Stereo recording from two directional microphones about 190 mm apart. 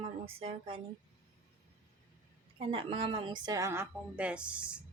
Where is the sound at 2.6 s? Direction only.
30° right (ahead or behind); by 4.8 s 5° right (ahead or behind).